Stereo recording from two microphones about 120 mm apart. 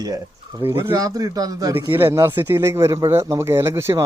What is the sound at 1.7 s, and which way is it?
Speech, 20° right (ahead or behind).